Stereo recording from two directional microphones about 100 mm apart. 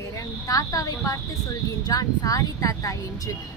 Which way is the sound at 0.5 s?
35° left (ahead or behind).